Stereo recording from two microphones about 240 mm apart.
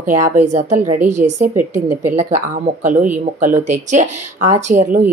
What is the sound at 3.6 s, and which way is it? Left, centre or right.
Speech, right.